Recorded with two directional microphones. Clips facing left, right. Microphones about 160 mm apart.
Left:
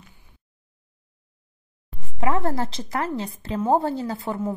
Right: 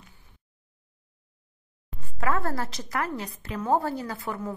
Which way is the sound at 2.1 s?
20° left (ahead or behind).